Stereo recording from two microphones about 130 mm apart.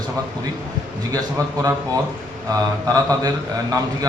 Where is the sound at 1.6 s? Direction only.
25° right (ahead or behind).